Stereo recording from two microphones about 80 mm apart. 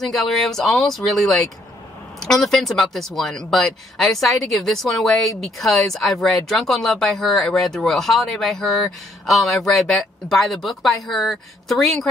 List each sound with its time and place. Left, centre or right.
0.0 s speech: centre